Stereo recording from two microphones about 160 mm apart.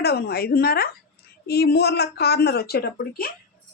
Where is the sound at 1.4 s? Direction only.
80° left.